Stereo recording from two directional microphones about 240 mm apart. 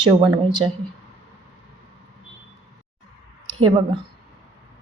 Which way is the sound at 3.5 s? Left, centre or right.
Right.